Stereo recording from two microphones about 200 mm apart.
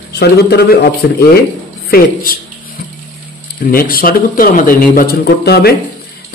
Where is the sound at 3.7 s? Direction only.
45° left (ahead or behind).